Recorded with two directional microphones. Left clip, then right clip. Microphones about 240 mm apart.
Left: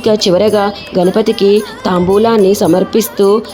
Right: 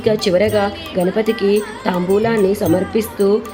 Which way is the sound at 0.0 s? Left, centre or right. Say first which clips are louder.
Left 5 dB; left.